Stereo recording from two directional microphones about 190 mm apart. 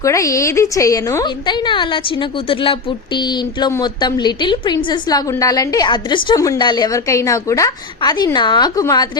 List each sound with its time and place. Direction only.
0.0 s a woman's voice: 15° left (ahead or behind)